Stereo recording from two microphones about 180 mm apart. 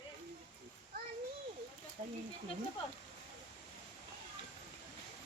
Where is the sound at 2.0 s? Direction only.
40° right (ahead or behind).